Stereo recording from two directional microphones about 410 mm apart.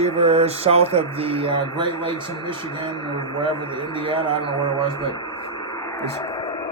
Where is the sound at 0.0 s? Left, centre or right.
Centre.